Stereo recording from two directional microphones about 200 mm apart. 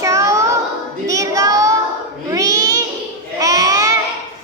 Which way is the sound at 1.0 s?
15° right (ahead or behind).